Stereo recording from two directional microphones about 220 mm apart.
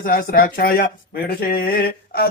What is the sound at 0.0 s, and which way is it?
Speech, 40° left (ahead or behind).